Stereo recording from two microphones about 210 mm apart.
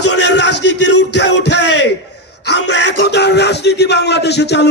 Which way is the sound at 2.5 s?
55° left (ahead or behind).